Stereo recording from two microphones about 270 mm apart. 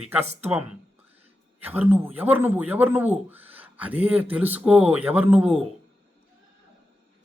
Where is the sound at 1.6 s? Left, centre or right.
Centre.